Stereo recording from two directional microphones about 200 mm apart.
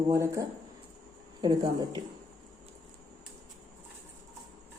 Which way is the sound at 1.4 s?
20° right (ahead or behind).